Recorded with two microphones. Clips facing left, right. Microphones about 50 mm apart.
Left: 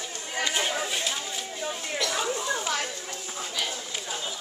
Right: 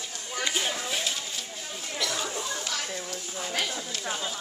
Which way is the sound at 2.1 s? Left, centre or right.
Centre.